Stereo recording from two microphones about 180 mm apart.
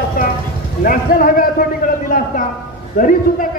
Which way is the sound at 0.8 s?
50° left (ahead or behind).